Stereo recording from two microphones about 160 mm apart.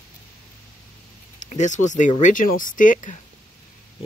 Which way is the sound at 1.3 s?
50° left (ahead or behind).